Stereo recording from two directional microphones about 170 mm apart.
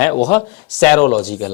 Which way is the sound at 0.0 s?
10° left (ahead or behind).